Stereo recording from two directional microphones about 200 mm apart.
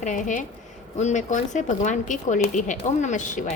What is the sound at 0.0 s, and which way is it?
Speech, 40° left (ahead or behind).